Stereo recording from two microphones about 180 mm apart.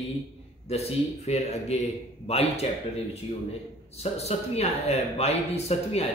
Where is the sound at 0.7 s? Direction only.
35° left (ahead or behind).